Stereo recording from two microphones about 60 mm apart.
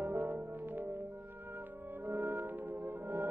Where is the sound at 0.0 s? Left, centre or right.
Right.